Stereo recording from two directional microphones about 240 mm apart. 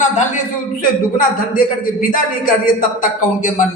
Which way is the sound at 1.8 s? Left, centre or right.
Left.